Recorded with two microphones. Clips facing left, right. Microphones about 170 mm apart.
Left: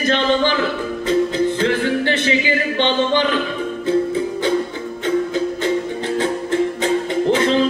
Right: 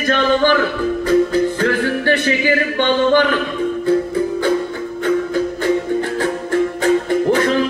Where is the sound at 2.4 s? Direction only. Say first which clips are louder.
Right 2 dB; 50° right (ahead or behind).